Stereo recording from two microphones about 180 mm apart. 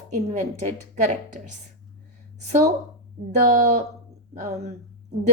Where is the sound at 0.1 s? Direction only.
40° right (ahead or behind).